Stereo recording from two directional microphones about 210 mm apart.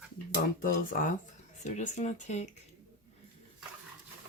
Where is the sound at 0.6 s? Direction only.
40° left (ahead or behind).